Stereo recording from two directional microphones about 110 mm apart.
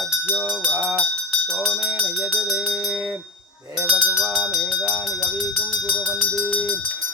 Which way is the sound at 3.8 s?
5° right (ahead or behind).